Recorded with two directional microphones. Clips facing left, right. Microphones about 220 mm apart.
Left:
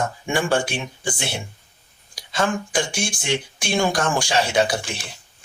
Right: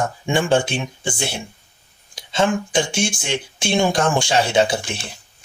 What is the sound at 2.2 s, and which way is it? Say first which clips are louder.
Speech: right 4 dB; 25° right (ahead or behind).